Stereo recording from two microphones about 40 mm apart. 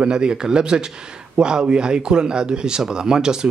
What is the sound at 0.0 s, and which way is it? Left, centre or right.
Speech, right.